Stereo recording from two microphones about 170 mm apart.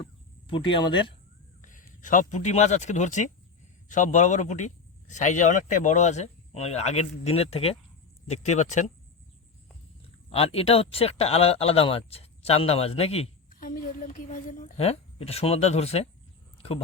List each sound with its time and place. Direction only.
0.0 s cricket: 30° left (ahead or behind)
1.6 s speech: 50° left (ahead or behind)
10.2 s speech: 35° left (ahead or behind)
13.5 s speech: 55° left (ahead or behind)
14.8 s speech: 35° left (ahead or behind)